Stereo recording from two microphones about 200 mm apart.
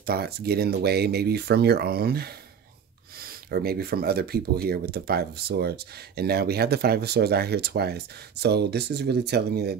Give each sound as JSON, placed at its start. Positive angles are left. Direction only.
{"t": 0.0, "sound": "speech", "side_deg": -50}